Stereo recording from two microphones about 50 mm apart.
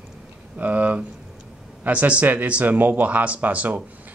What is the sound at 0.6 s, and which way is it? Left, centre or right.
Speech, right.